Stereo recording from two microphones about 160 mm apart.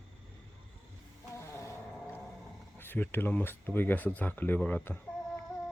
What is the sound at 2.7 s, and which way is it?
Speech, 15° left (ahead or behind).